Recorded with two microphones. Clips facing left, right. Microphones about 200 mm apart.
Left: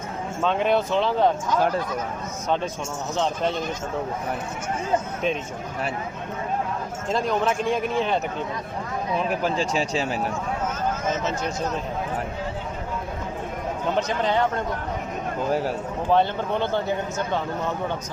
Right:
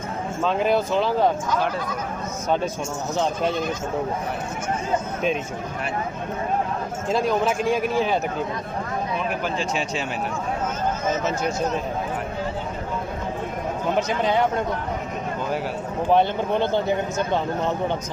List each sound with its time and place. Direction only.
0.4 s a man's voice: centre (ahead or behind)
7.1 s a man's voice: 5° right (ahead or behind)
9.4 s speech: 35° left (ahead or behind)
13.9 s speech: 10° right (ahead or behind)
16.0 s speech: 15° right (ahead or behind)